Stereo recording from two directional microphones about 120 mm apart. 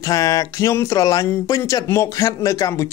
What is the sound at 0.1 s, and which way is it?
Speech, 30° left (ahead or behind).